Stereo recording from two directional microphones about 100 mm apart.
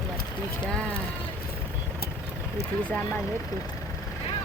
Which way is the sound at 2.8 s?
15° left (ahead or behind).